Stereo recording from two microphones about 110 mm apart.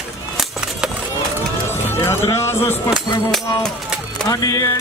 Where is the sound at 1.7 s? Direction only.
25° left (ahead or behind).